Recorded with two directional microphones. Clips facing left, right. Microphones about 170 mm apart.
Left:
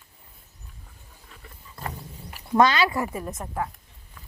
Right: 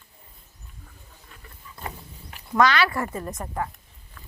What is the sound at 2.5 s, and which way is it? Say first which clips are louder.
Speech: left 1 dB; 20° left (ahead or behind).